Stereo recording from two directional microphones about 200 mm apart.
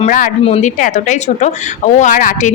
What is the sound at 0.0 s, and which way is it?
Speech, 40° left (ahead or behind).